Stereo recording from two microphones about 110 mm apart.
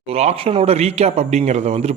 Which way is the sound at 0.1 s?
70° right (ahead or behind).